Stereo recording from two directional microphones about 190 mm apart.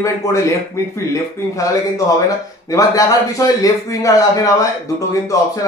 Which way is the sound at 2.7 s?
15° left (ahead or behind).